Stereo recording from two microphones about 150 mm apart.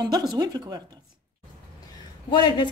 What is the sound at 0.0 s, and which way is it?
Speech, 30° right (ahead or behind).